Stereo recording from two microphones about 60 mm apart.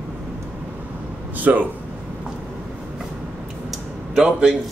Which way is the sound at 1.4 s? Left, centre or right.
Right.